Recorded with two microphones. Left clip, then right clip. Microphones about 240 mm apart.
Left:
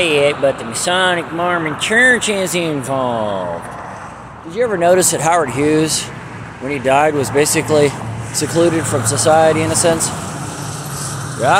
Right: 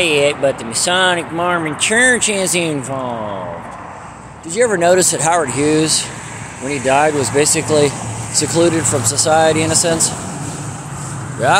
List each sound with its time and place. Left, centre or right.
0.0 s speech: centre
4.6 s speech: centre
4.8 s speech: centre